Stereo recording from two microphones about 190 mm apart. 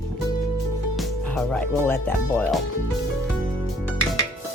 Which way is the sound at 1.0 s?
5° left (ahead or behind).